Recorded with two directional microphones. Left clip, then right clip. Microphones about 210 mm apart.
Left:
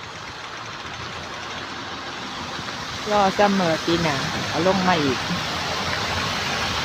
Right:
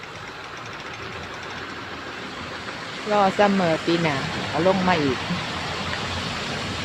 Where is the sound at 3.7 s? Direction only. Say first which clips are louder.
Left 1 dB; 50° left (ahead or behind).